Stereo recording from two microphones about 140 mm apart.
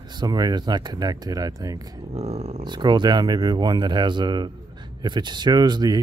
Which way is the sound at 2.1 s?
50° right (ahead or behind).